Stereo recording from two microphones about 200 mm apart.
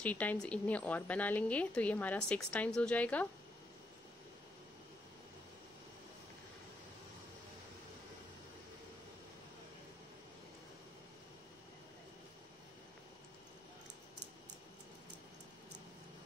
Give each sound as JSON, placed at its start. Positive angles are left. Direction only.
{"t": 0.0, "sound": "a woman's voice", "side_deg": 5}